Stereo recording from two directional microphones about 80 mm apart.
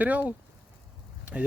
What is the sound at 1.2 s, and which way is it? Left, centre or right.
Clip-clop, centre.